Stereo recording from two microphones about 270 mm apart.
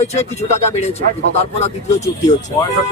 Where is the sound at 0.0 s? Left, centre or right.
Left.